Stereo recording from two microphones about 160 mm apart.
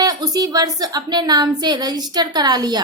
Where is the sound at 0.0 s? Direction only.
25° right (ahead or behind).